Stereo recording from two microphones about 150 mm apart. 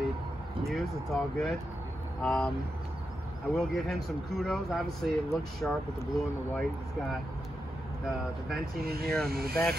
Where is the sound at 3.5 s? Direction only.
Centre (ahead or behind).